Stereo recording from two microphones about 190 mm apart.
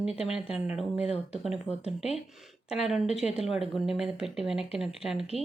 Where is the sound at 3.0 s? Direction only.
35° left (ahead or behind).